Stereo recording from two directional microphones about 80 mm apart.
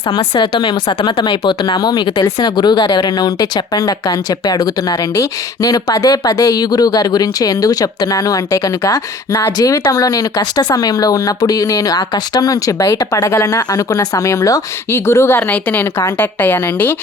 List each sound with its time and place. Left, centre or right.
0.1 s a woman's voice: left
15.0 s a woman's voice: left